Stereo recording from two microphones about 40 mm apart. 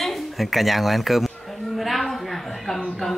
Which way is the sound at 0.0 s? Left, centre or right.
Centre.